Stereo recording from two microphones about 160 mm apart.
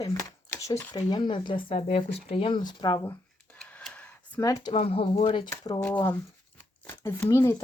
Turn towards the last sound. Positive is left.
turn(degrees=15)  # may be behind; listen again after turning